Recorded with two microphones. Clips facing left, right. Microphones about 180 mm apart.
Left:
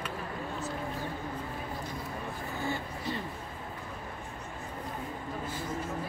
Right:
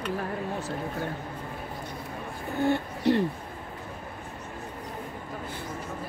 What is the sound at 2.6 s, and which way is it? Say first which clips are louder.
Speech: right 12 dB; 70° right (ahead or behind).